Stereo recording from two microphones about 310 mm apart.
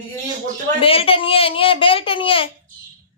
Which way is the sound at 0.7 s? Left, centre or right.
Centre.